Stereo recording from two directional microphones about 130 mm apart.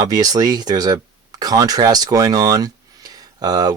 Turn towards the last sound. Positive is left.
turn(degrees=-30)  # may be behind; listen again after turning